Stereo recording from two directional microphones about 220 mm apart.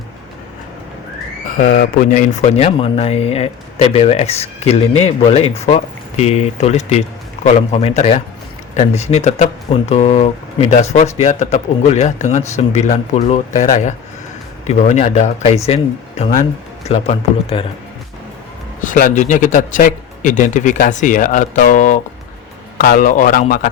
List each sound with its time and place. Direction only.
1.5 s a man's voice: 35° left (ahead or behind)
18.8 s a man's voice: 35° left (ahead or behind)